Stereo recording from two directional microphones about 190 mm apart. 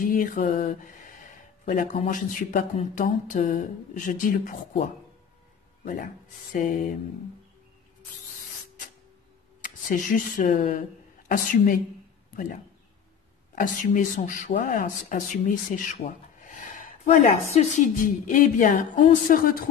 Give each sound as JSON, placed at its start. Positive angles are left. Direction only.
{"t": 0.0, "sound": "mantra", "side_deg": 45}
{"t": 1.7, "sound": "speech", "side_deg": 40}
{"t": 6.5, "sound": "speech", "side_deg": 45}
{"t": 9.6, "sound": "speech", "side_deg": 45}
{"t": 13.6, "sound": "speech", "side_deg": 45}